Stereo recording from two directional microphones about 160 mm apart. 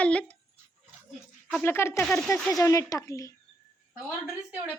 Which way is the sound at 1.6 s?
15° left (ahead or behind).